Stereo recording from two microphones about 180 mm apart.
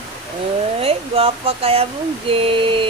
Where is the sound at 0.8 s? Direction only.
30° right (ahead or behind).